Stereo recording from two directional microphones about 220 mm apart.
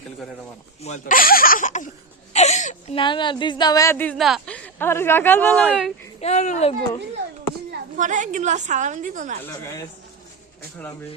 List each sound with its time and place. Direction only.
0.8 s a woman's voice: 30° left (ahead or behind); by 5.5 s 10° left (ahead or behind)
5.5 s speech: 5° right (ahead or behind)
6.1 s speech: 30° left (ahead or behind)
7.9 s a woman's voice: 35° right (ahead or behind)
9.4 s speech: 15° left (ahead or behind)